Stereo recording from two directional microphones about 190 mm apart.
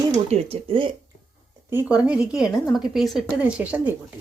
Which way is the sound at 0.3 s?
30° right (ahead or behind).